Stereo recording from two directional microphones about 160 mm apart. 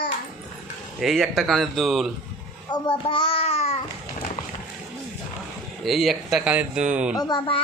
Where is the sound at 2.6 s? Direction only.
25° left (ahead or behind).